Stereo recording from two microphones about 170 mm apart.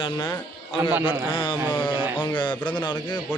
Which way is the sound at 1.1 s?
30° left (ahead or behind).